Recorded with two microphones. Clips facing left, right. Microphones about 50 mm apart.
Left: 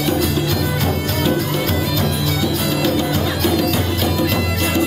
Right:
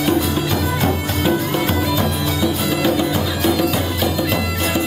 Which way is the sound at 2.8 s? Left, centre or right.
Centre.